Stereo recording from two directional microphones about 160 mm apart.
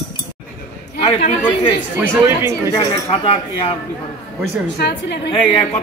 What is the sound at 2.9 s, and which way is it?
Speech, 35° left (ahead or behind).